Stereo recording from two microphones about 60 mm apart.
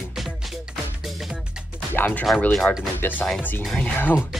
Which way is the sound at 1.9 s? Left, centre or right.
Left.